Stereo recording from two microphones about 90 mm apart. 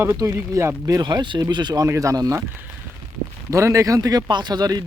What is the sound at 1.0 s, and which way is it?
Speech, 55° right (ahead or behind).